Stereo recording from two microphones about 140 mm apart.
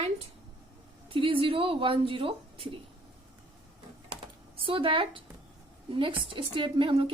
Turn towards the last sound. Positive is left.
turn(degrees=-35)  # may be behind; listen again after turning